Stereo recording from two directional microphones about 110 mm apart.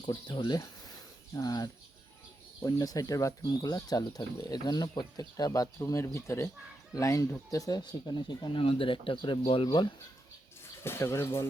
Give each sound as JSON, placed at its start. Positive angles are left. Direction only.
{"t": 0.0, "sound": "speech", "side_deg": 45}
{"t": 9.4, "sound": "speech", "side_deg": 60}
{"t": 10.8, "sound": "speech", "side_deg": 25}